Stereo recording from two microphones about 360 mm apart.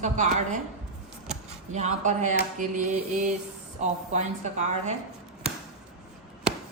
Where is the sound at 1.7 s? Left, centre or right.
Centre.